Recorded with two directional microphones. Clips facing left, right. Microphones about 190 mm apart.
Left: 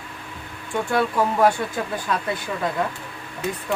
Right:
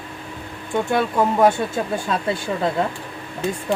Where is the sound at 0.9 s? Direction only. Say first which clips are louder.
Right 1 dB; 20° right (ahead or behind).